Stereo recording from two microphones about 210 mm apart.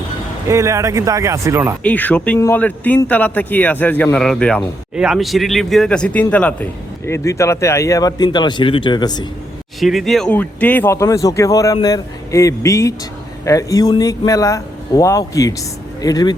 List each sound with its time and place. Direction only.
0.4 s speech: 15° right (ahead or behind)
1.8 s speech: 5° left (ahead or behind)
9.8 s speech: centre (ahead or behind); by 16.3 s 20° left (ahead or behind)